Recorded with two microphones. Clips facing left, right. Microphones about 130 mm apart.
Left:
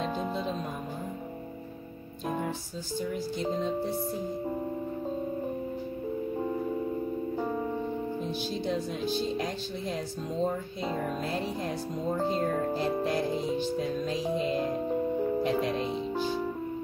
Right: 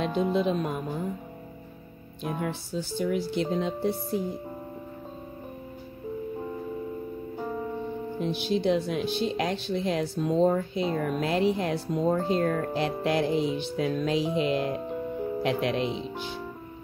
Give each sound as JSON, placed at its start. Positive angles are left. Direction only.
{"t": 0.0, "sound": "music", "side_deg": -75}
{"t": 3.0, "sound": "speech", "side_deg": -70}
{"t": 8.2, "sound": "speech", "side_deg": -70}